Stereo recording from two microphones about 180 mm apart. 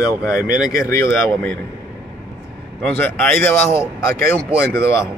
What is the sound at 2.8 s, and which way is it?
Speech, 10° left (ahead or behind).